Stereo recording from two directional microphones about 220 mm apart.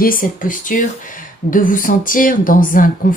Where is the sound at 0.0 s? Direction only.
40° left (ahead or behind).